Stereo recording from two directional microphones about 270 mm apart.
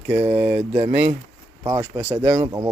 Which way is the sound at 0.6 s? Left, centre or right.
Right.